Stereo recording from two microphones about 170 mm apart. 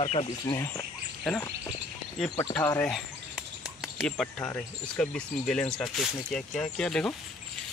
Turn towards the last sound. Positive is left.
turn(degrees=5)  # may be behind; listen again after turning